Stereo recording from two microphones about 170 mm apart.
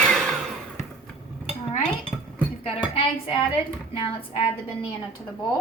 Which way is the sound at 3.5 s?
35° left (ahead or behind).